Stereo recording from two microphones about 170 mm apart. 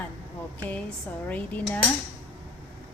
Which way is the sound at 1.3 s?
10° left (ahead or behind).